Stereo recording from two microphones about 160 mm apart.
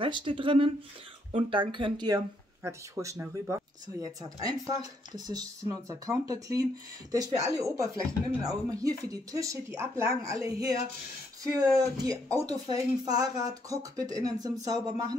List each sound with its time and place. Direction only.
0.0 s speech: 35° right (ahead or behind)